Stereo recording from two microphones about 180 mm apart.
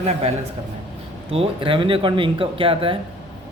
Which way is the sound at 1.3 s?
30° right (ahead or behind).